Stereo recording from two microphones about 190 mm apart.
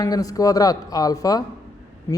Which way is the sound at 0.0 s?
20° left (ahead or behind).